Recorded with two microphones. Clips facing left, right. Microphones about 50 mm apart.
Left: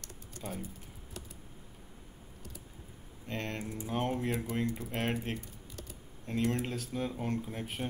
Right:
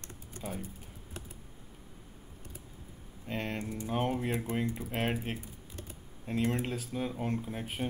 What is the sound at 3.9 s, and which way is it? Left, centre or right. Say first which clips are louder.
Speech: right 1 dB; centre.